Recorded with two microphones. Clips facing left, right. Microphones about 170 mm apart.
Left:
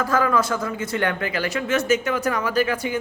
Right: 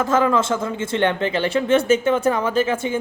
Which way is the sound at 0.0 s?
25° right (ahead or behind).